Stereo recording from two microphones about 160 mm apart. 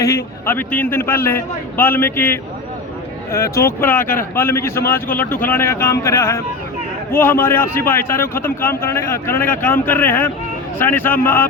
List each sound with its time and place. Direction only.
0.0 s a man's voice: 15° left (ahead or behind)